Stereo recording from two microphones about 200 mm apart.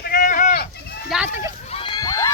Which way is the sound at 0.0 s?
45° left (ahead or behind).